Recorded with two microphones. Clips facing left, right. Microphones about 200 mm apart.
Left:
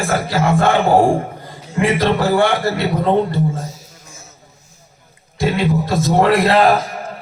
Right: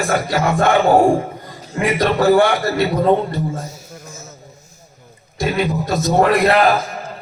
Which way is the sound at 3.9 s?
40° right (ahead or behind).